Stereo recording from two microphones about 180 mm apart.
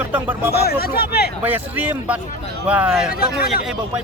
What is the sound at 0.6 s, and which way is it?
Speech, 60° left (ahead or behind).